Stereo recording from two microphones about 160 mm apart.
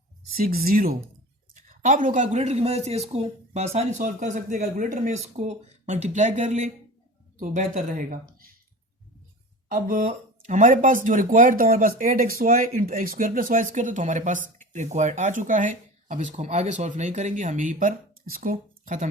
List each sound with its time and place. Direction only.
0.3 s speech: 65° right (ahead or behind)
1.5 s speech: 55° right (ahead or behind)
9.6 s speech: 60° right (ahead or behind)